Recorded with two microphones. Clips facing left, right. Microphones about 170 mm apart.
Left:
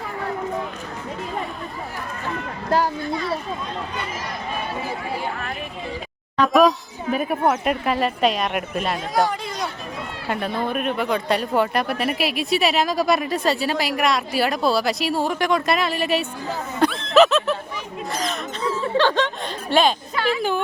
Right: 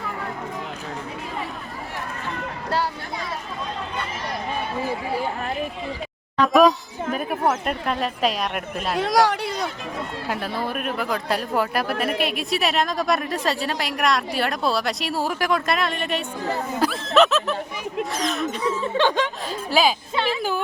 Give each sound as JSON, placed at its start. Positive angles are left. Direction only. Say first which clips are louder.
{"t": 2.6, "sound": "a sound", "louder": "left 4 dB", "side_deg": 45}
{"t": 6.5, "sound": "speech", "louder": "right 1 dB", "side_deg": 0}
{"t": 9.0, "sound": "speech", "louder": "right 6 dB", "side_deg": -80}
{"t": 10.2, "sound": "speech", "louder": "left 4 dB", "side_deg": 0}
{"t": 16.8, "sound": "snicker", "louder": "left 3 dB", "side_deg": -5}
{"t": 18.1, "sound": "speech", "louder": "left 2 dB", "side_deg": 0}
{"t": 18.6, "sound": "speech", "louder": "left 3 dB", "side_deg": -15}
{"t": 19.7, "sound": "speech", "louder": "left 2 dB", "side_deg": 0}
{"t": 20.2, "sound": "speech", "louder": "left 2 dB", "side_deg": -25}